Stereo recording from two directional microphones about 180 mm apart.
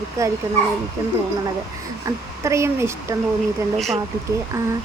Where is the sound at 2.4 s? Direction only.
15° right (ahead or behind).